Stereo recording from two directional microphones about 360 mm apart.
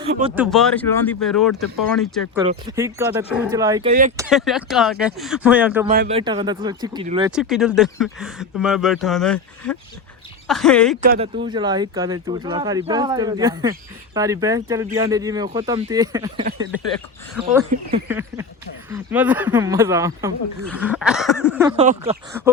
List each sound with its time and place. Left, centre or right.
0.1 s speech: centre
0.3 s speech: centre
2.3 s speech: centre
5.9 s speech: right
7.3 s speech: centre
11.0 s speech: right
11.4 s speech: centre
17.5 s speech: centre
21.8 s speech: centre